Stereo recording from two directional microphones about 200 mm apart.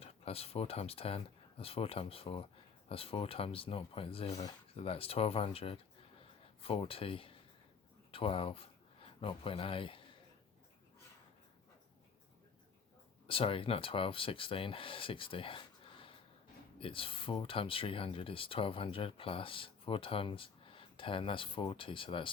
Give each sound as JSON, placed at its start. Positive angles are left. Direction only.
{"t": 0.0, "sound": "speech", "side_deg": 30}
{"t": 13.2, "sound": "speech", "side_deg": 25}